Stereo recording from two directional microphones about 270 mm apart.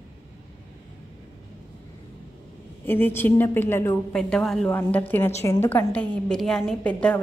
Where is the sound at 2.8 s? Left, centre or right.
Centre.